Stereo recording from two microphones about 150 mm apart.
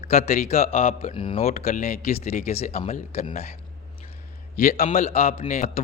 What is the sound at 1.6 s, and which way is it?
Speech, 55° left (ahead or behind).